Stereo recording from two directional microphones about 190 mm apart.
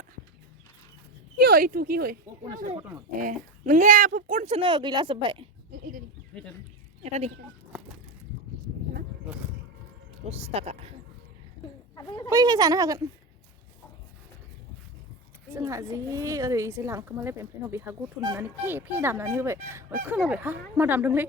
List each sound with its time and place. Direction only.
1.4 s speech: 55° right (ahead or behind)
3.2 s speech: 45° right (ahead or behind); by 5.5 s 25° right (ahead or behind)
6.3 s speech: 5° left (ahead or behind)
7.0 s speech: 35° right (ahead or behind)
10.2 s speech: 30° right (ahead or behind)
11.9 s speech: 20° left (ahead or behind)
12.3 s speech: 20° right (ahead or behind)
15.5 s speech: 15° right (ahead or behind)